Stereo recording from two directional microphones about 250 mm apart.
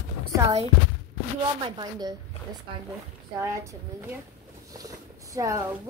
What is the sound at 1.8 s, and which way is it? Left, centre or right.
Speech, centre.